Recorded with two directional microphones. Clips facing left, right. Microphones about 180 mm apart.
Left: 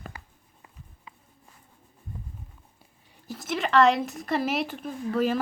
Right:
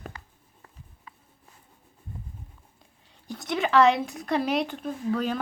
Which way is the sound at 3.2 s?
Centre (ahead or behind).